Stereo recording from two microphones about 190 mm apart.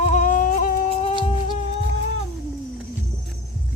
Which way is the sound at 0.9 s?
35° left (ahead or behind).